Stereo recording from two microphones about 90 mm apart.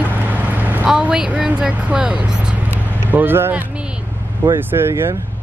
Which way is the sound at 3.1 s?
25° right (ahead or behind).